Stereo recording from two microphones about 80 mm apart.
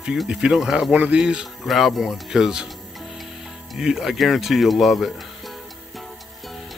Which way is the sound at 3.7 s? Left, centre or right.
Centre.